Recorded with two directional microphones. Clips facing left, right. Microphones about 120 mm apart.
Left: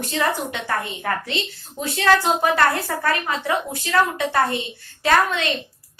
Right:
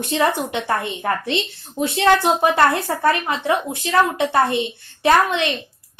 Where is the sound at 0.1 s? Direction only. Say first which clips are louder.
Right 4 dB; 25° right (ahead or behind).